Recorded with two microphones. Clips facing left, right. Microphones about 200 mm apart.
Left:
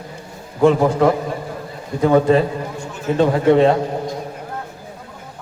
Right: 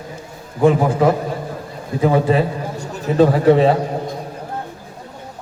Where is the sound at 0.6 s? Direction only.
5° right (ahead or behind).